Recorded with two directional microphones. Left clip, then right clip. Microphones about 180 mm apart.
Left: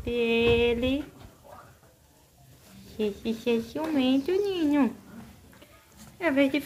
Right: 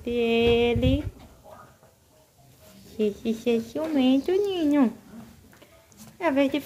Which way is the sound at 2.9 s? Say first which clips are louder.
Right 3 dB; 15° right (ahead or behind).